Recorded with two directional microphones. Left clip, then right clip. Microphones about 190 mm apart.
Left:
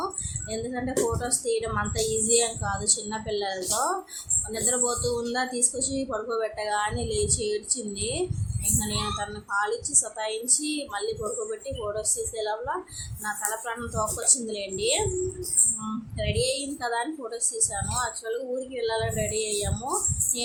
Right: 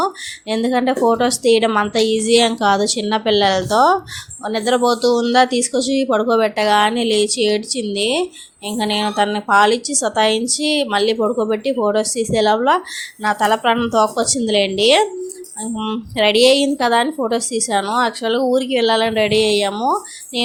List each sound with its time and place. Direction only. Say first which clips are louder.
0.0 s speech: right 12 dB; 45° right (ahead or behind)
16.1 s speech: right 16 dB; 50° right (ahead or behind)